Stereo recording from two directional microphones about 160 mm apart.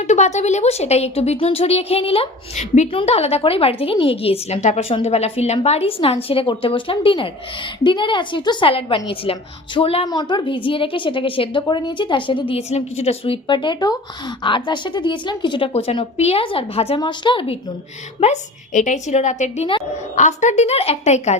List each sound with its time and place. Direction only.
0.0 s a woman's voice: 45° left (ahead or behind)
18.2 s a woman's voice: 50° left (ahead or behind)